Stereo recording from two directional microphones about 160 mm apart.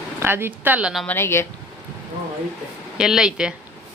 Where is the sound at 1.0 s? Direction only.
15° left (ahead or behind).